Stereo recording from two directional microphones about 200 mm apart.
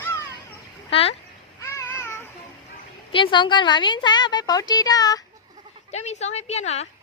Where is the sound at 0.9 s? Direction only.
30° left (ahead or behind).